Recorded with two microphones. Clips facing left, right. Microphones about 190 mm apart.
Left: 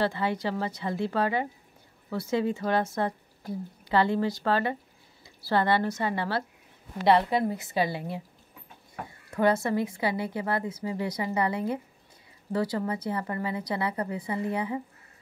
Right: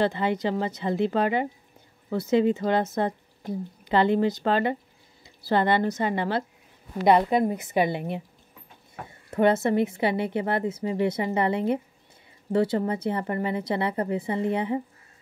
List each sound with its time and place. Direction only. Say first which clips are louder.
0.0 s speech: right 3 dB; 20° right (ahead or behind)
9.3 s speech: right 3 dB; 25° right (ahead or behind)